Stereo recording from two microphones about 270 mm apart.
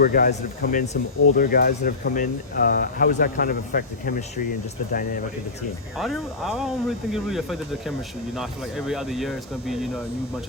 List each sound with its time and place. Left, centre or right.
0.0 s speech: left
6.0 s speech: centre